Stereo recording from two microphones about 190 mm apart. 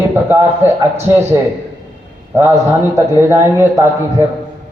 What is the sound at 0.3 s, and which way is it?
Speech, 10° right (ahead or behind).